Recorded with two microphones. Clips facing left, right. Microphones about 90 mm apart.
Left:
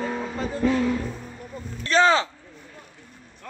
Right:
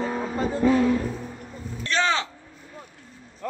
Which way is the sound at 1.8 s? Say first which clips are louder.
Left 5 dB; 40° left (ahead or behind).